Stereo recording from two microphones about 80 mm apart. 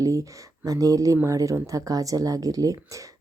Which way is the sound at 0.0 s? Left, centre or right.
Right.